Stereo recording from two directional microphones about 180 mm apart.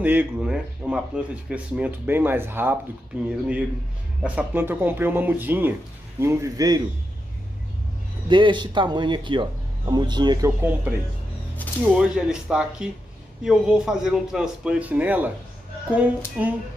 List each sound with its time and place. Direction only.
0.0 s a man's voice: 10° right (ahead or behind)
8.3 s speech: 25° right (ahead or behind)
10.6 s a man's voice: 10° right (ahead or behind)
16.4 s speech: 10° right (ahead or behind)